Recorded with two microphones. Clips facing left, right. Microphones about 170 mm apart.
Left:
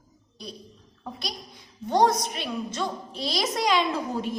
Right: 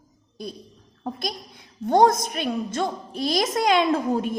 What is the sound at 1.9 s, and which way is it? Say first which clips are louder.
A woman's voice: right 4 dB; 50° right (ahead or behind).